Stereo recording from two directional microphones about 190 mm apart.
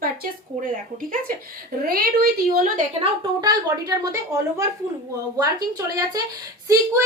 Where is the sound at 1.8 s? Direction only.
50° right (ahead or behind).